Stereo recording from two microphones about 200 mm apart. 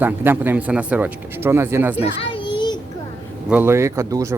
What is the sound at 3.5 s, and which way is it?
Speech, 10° right (ahead or behind).